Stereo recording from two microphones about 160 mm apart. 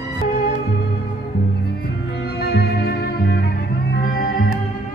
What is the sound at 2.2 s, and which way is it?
Music, 75° left (ahead or behind).